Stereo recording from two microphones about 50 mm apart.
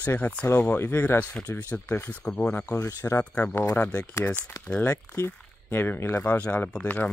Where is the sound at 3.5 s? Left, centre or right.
Left.